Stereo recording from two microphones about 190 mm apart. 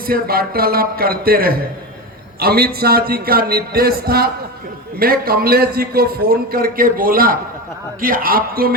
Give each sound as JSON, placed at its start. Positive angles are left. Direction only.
{"t": 0.0, "sound": "a man's voice", "side_deg": -50}